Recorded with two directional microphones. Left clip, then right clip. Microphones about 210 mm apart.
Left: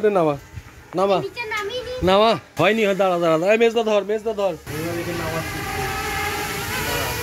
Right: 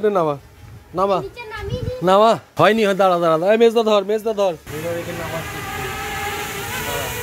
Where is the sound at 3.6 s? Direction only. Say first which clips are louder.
Right 3 dB; 30° right (ahead or behind).